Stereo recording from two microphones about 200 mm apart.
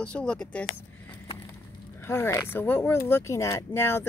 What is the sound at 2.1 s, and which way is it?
A man's voice, 15° left (ahead or behind).